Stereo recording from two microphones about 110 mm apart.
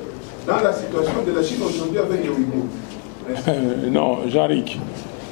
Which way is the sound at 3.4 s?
15° left (ahead or behind).